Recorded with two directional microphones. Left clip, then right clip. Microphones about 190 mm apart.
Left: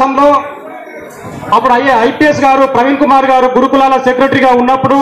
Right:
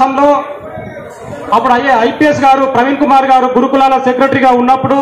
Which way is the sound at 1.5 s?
15° left (ahead or behind).